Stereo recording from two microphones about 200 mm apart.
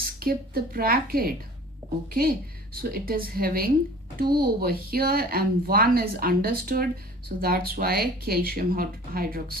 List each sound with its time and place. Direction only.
0.0 s a woman's voice: 50° right (ahead or behind)